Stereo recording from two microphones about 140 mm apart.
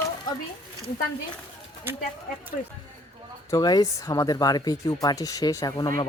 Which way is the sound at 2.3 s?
90° left.